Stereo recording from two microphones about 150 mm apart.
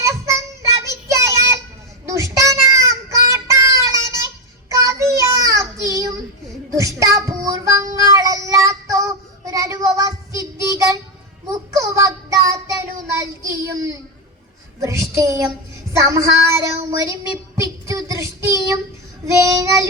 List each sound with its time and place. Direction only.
0.0 s child singing: 20° right (ahead or behind)